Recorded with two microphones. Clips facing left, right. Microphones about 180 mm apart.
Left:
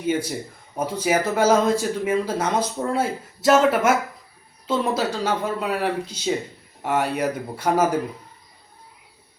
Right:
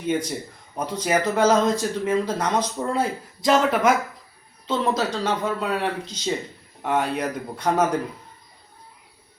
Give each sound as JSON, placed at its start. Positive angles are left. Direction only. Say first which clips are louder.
{"t": 0.0, "sound": "a man's voice", "louder": "left 1 dB", "side_deg": 5}